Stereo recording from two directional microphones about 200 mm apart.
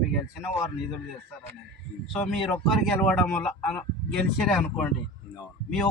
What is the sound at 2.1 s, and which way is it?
A man's voice, 5° left (ahead or behind).